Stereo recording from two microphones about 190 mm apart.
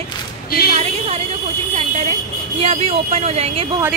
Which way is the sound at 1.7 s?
35° right (ahead or behind).